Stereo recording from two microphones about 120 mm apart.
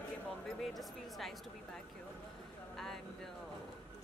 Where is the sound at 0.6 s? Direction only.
Centre (ahead or behind).